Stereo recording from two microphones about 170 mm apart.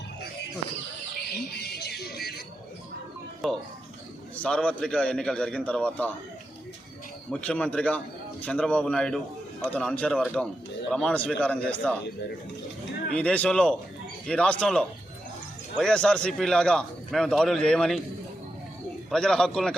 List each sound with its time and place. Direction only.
1.6 s a sound: 65° left (ahead or behind)
3.4 s a man's voice: centre (ahead or behind)
7.3 s a man's voice: 5° left (ahead or behind)
13.1 s a man's voice: 5° left (ahead or behind)
19.1 s a man's voice: 5° left (ahead or behind)